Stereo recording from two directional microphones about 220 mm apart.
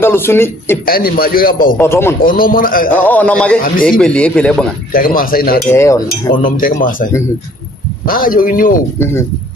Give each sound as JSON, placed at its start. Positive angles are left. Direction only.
{"t": 0.0, "sound": "a man's voice", "side_deg": 10}
{"t": 0.9, "sound": "a man's voice", "side_deg": 40}
{"t": 1.8, "sound": "a man's voice", "side_deg": 10}
{"t": 2.2, "sound": "a man's voice", "side_deg": 40}
{"t": 2.9, "sound": "a man's voice", "side_deg": 5}
{"t": 4.9, "sound": "a man's voice", "side_deg": 40}
{"t": 5.6, "sound": "a man's voice", "side_deg": 10}
{"t": 6.3, "sound": "a man's voice", "side_deg": 40}